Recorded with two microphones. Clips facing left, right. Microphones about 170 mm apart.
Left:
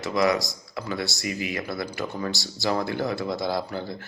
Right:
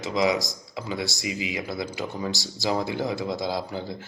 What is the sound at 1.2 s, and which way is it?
Speech, 55° left (ahead or behind).